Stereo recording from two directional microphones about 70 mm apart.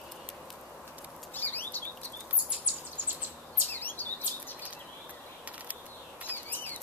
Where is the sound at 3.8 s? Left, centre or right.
Left.